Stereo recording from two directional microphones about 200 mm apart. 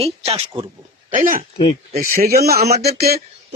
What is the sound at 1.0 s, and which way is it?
Speech, 40° right (ahead or behind).